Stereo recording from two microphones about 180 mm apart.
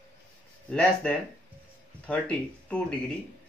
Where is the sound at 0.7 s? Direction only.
5° left (ahead or behind).